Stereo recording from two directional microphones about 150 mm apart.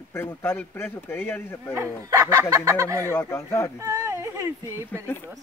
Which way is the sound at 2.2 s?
20° right (ahead or behind).